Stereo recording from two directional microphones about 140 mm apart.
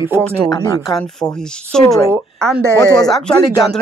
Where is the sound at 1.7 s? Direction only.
5° left (ahead or behind).